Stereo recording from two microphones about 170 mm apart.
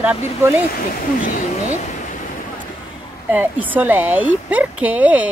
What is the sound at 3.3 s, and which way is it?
A woman's voice, 10° right (ahead or behind).